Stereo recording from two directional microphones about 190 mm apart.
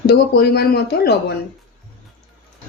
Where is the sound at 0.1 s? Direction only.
55° left (ahead or behind).